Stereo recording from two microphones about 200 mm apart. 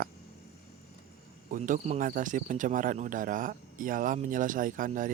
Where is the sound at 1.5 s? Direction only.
40° right (ahead or behind).